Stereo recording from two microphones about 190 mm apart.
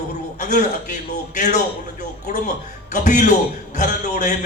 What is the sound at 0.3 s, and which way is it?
A man's voice, 40° left (ahead or behind).